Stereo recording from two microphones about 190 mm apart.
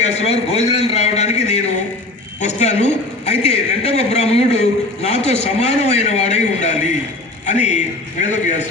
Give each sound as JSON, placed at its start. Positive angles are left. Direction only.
{"t": 0.0, "sound": "a man's voice", "side_deg": 35}